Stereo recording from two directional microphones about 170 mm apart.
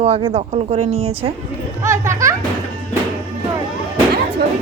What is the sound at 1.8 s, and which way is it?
Speech, 15° right (ahead or behind).